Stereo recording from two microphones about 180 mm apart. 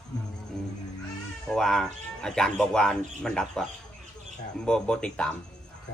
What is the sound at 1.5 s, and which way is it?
A man's voice, 5° left (ahead or behind).